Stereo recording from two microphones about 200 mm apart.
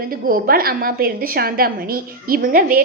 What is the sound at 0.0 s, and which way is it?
A woman's voice, 45° right (ahead or behind).